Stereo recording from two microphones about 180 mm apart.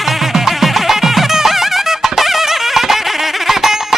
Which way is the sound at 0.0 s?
Centre (ahead or behind).